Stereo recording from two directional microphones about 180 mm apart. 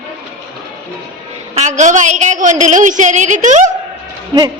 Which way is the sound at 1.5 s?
40° right (ahead or behind).